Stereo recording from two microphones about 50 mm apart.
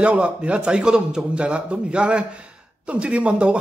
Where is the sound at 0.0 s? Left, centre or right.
Right.